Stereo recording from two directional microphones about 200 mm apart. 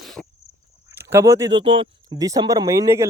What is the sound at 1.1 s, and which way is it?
Speech, 15° right (ahead or behind).